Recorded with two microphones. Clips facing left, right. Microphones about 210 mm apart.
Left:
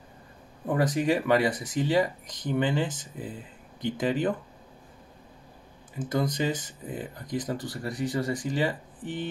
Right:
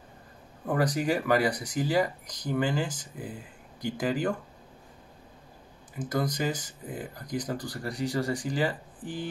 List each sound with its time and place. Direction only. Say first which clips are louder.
0.7 s speech: left 2 dB; 25° left (ahead or behind)
5.9 s speech: left 2 dB; 25° left (ahead or behind)